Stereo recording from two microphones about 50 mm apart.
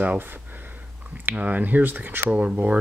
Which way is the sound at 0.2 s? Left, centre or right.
Right.